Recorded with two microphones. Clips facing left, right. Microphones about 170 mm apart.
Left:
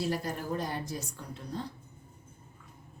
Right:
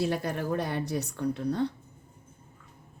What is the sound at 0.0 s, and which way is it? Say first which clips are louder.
A woman's voice: right 4 dB; 65° right (ahead or behind).